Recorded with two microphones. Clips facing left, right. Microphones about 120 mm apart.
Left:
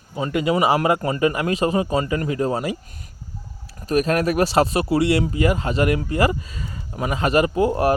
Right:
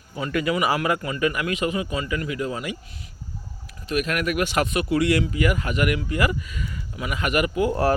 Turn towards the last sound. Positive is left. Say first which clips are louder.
# left 3 dB
turn(degrees=25)  # may be behind; listen again after turning